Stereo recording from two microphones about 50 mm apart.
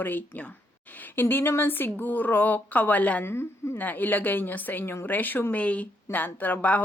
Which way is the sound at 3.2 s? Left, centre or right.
Left.